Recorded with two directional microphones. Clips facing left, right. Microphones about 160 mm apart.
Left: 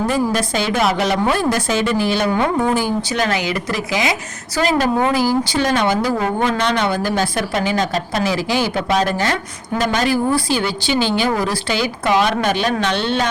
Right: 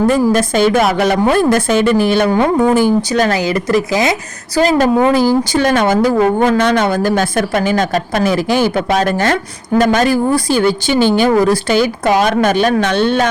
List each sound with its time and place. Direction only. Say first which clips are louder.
0.1 s speech: right 6 dB; 50° right (ahead or behind)